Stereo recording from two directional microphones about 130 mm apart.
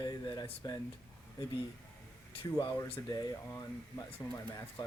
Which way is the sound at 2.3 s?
45° left (ahead or behind).